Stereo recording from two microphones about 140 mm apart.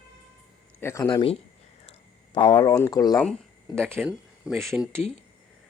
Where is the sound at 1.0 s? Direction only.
30° left (ahead or behind).